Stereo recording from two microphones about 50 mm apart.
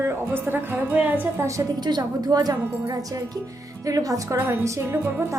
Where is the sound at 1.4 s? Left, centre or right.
Right.